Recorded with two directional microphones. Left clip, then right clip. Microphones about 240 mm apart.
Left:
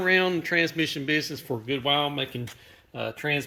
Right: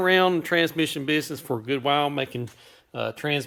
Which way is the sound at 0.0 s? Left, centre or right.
Centre.